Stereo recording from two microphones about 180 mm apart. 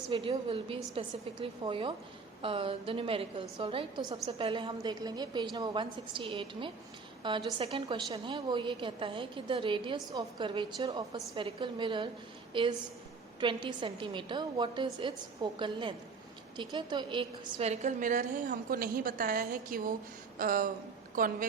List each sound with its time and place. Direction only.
0.1 s a woman's voice: 30° right (ahead or behind); by 21.4 s 50° right (ahead or behind)